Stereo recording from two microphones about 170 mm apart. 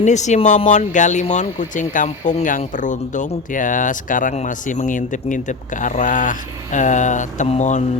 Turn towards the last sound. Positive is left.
turn(degrees=40)  # may be behind; listen again after turning